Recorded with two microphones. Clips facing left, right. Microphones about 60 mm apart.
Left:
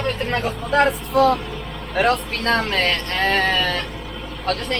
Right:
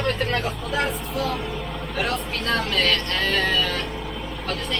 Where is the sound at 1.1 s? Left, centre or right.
Left.